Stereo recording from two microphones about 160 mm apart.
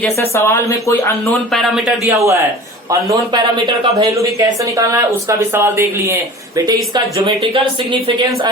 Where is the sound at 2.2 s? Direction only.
20° right (ahead or behind).